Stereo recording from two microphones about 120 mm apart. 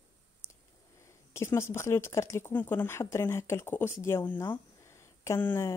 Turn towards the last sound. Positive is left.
turn(degrees=20)  # may be behind; listen again after turning